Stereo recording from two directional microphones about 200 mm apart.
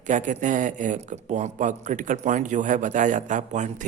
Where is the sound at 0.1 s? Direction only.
40° right (ahead or behind).